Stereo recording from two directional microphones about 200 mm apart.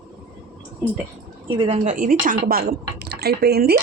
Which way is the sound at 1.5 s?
25° right (ahead or behind).